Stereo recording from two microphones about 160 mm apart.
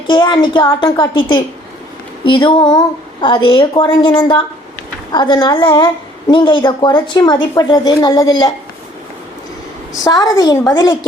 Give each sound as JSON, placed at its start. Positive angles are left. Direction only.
{"t": 0.1, "sound": "a woman's voice", "side_deg": 30}
{"t": 10.0, "sound": "a woman's voice", "side_deg": 25}